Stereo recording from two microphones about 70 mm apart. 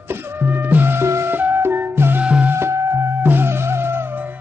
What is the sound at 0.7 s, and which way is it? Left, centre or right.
Music, right.